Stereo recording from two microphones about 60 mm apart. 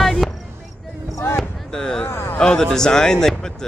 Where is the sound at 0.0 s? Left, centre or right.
Centre.